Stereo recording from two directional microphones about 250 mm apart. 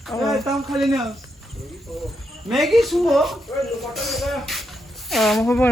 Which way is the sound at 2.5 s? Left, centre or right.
Centre.